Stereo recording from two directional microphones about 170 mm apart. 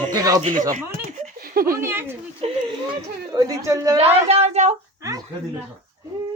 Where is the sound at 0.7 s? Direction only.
55° right (ahead or behind).